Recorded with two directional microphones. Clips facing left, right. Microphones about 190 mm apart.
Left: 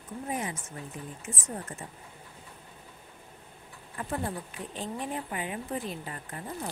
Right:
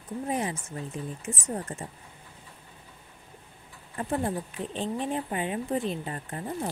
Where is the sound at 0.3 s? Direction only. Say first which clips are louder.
Right 4 dB; 30° right (ahead or behind).